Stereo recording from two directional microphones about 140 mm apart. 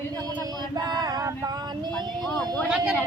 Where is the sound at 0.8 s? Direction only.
30° right (ahead or behind).